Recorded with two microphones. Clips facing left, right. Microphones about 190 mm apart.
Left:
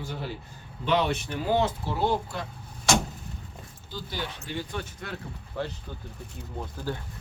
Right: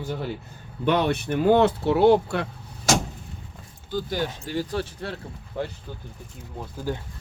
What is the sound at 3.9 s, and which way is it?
Speech, 45° right (ahead or behind).